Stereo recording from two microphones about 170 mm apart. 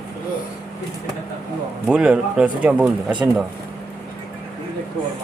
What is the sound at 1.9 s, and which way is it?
Speech, 5° right (ahead or behind).